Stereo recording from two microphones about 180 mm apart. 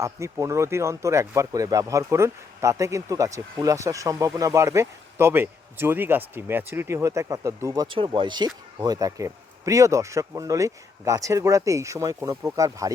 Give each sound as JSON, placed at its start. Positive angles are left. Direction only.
{"t": 0.0, "sound": "speech", "side_deg": -15}